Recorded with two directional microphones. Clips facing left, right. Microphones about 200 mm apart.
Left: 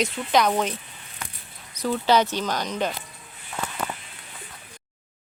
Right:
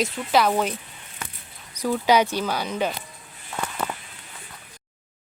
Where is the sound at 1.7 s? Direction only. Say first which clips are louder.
Right 1 dB; 10° right (ahead or behind).